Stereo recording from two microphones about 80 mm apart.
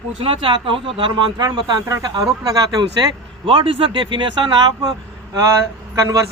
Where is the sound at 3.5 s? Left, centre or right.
Right.